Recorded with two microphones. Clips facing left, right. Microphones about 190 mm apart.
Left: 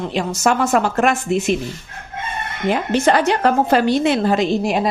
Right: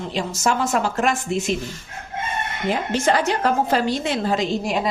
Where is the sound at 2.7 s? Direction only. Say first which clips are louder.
Left 4 dB; 65° left (ahead or behind).